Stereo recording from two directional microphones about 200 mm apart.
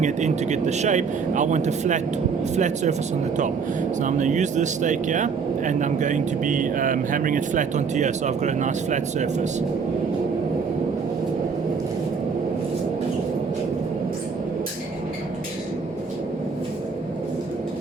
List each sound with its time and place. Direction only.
0.0 s speech: 35° right (ahead or behind)
4.0 s speech: 40° right (ahead or behind)